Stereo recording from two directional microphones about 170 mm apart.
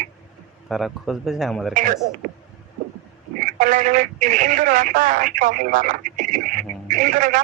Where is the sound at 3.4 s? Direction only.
50° right (ahead or behind).